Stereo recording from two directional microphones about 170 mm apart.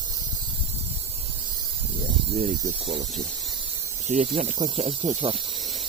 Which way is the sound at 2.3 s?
40° right (ahead or behind).